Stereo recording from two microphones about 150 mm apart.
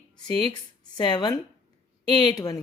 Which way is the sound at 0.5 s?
30° left (ahead or behind).